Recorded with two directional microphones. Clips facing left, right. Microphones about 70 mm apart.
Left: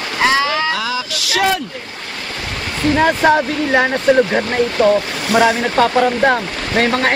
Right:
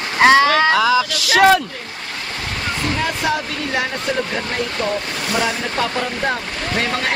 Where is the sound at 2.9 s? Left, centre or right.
Left.